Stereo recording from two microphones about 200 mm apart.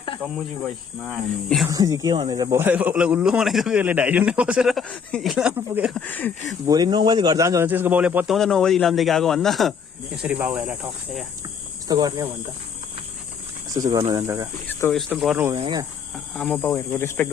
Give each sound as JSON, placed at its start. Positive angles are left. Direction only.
{"t": 1.0, "sound": "speech", "side_deg": 0}
{"t": 1.6, "sound": "speech", "side_deg": -15}
{"t": 6.0, "sound": "insect", "side_deg": 10}
{"t": 6.7, "sound": "speech", "side_deg": -20}
{"t": 11.9, "sound": "speech", "side_deg": -20}
{"t": 13.7, "sound": "speech", "side_deg": -20}
{"t": 14.7, "sound": "speech", "side_deg": 10}
{"t": 15.5, "sound": "speech", "side_deg": -20}
{"t": 16.1, "sound": "insect", "side_deg": 0}